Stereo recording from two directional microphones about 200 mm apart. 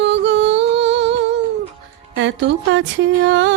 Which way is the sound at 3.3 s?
65° right (ahead or behind).